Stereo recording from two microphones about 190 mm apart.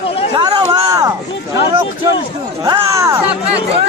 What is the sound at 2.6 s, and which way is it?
Speech, 15° right (ahead or behind).